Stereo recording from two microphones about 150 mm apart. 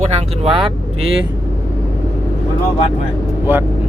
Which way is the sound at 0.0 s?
45° right (ahead or behind).